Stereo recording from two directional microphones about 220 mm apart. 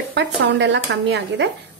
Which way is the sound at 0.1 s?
55° right (ahead or behind).